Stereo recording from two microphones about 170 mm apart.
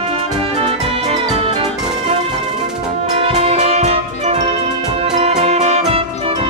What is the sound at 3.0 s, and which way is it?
Music, 40° right (ahead or behind).